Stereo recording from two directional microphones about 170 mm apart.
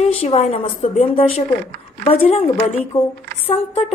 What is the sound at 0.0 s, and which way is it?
A woman's voice, 35° left (ahead or behind).